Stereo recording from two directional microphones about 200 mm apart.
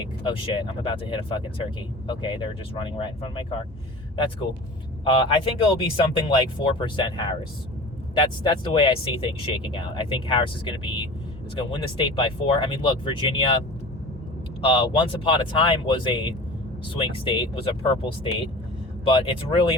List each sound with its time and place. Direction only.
0.3 s speech: 25° left (ahead or behind)
5.0 s speech: 25° left (ahead or behind)
14.6 s speech: 25° left (ahead or behind)
19.2 s speech: 25° left (ahead or behind)